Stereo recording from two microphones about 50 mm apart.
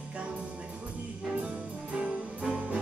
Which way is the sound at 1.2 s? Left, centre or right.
Right.